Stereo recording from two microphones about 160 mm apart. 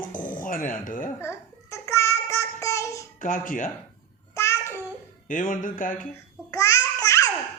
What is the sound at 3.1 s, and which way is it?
Speech, 55° left (ahead or behind).